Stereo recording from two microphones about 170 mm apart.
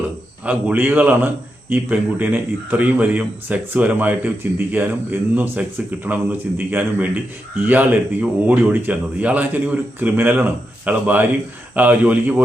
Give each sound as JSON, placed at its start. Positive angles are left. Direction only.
{"t": 0.4, "sound": "speech", "side_deg": -10}